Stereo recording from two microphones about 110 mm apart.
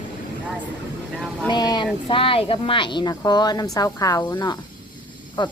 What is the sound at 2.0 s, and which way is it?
A woman's voice, 55° left (ahead or behind).